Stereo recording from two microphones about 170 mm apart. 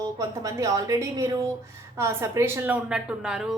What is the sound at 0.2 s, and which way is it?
A woman's voice, 20° right (ahead or behind).